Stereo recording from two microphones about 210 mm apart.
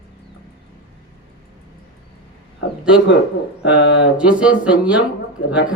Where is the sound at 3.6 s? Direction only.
55° left (ahead or behind).